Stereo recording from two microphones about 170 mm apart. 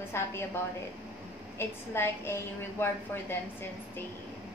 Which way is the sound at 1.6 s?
15° left (ahead or behind).